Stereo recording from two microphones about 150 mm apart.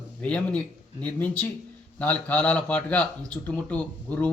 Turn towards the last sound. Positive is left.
turn(degrees=10)  # may be behind; listen again after turning